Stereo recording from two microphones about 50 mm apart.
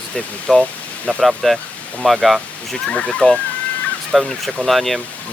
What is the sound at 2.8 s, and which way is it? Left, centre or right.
Speech, centre.